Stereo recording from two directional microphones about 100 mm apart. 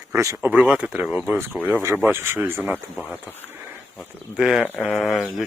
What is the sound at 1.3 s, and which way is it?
Speech, 25° right (ahead or behind).